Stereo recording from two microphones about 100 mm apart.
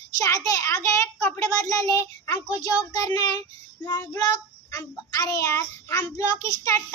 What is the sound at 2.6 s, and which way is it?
Child singing, 40° left (ahead or behind).